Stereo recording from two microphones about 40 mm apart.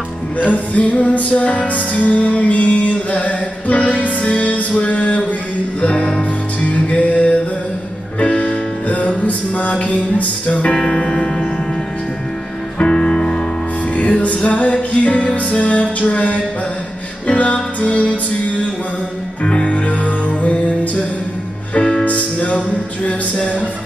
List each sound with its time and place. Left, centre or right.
0.4 s music: left
8.8 s music: left
10.8 s music: centre
12.7 s music: left
13.9 s music: left
19.4 s music: left
22.0 s music: left
23.0 s a sound: left